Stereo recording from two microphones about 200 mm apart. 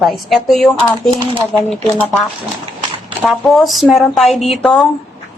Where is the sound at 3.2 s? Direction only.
Centre (ahead or behind).